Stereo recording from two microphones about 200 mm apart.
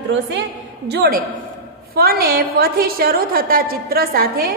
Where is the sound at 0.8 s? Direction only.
55° right (ahead or behind).